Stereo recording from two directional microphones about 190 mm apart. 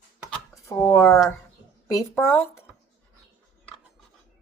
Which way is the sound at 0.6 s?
10° left (ahead or behind).